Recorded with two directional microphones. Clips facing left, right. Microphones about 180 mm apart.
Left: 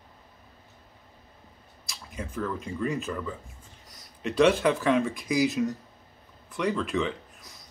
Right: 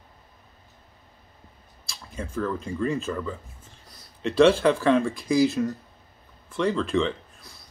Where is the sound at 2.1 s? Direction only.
15° left (ahead or behind).